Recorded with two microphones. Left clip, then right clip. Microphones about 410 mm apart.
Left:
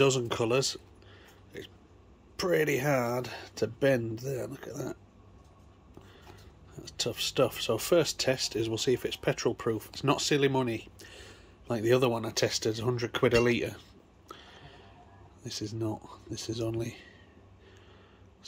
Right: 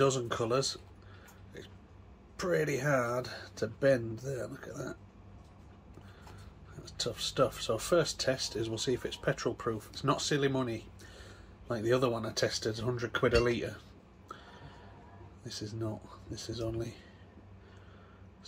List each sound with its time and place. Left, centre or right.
0.0 s speech: left
2.3 s speech: centre
6.8 s speech: left